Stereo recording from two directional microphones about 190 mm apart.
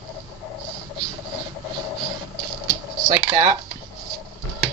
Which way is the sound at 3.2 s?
25° right (ahead or behind).